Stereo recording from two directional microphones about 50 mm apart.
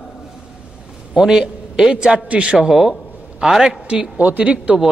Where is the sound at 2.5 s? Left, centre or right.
Centre.